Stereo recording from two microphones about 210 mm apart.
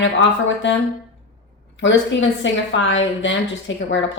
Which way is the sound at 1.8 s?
60° left (ahead or behind).